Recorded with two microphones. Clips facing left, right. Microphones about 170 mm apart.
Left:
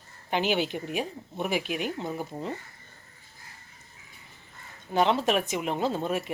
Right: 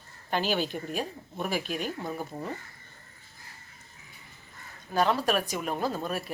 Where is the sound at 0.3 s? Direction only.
15° left (ahead or behind).